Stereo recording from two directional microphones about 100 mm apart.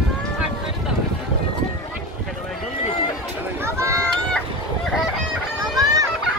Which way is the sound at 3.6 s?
30° right (ahead or behind).